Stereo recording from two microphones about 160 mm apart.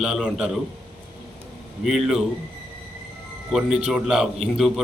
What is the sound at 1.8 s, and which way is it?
Speech, centre (ahead or behind).